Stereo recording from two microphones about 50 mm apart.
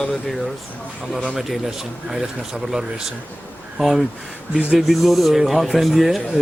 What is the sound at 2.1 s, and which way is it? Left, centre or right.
Speech, centre.